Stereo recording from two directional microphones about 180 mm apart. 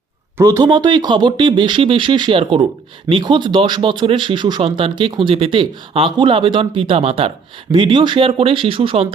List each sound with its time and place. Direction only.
0.3 s speech: 15° right (ahead or behind)